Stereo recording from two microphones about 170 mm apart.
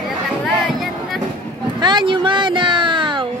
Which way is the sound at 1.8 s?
30° right (ahead or behind).